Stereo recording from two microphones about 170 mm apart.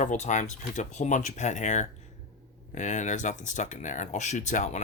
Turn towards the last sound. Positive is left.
turn(degrees=45)  # may be behind; listen again after turning